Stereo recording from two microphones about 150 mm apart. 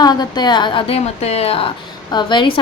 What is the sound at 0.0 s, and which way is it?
A woman's voice, 25° left (ahead or behind).